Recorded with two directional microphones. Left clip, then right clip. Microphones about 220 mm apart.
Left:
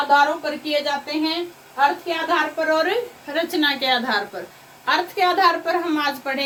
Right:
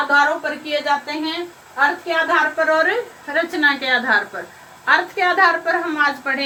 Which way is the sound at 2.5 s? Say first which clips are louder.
Right 3 dB; 15° left (ahead or behind).